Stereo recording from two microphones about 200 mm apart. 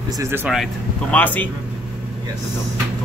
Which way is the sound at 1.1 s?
10° left (ahead or behind).